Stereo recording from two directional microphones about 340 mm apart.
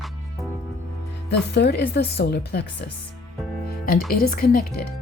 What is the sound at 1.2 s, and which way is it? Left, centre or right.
Speech, left.